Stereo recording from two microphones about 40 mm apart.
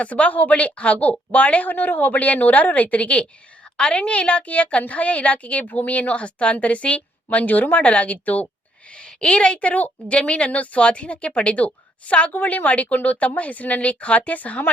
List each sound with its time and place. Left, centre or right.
0.0 s a woman's voice: left
8.9 s a woman's voice: left
12.3 s a woman's voice: left